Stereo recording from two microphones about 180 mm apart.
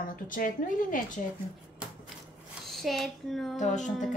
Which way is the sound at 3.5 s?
40° left (ahead or behind).